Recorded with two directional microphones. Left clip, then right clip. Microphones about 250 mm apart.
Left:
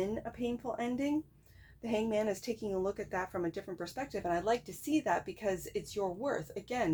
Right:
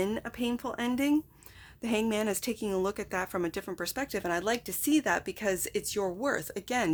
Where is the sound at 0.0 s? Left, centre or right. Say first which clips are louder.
Right 4 dB; right.